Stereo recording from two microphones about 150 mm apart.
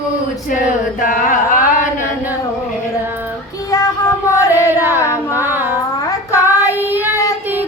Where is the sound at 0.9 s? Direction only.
65° left (ahead or behind).